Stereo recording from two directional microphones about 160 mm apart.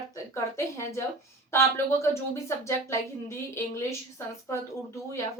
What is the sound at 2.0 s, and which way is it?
Speech, 15° left (ahead or behind).